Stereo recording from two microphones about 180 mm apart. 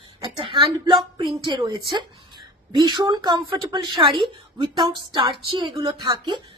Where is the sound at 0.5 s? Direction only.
25° right (ahead or behind).